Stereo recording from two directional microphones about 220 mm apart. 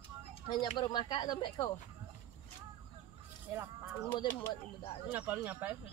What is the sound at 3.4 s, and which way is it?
Speech, 10° right (ahead or behind).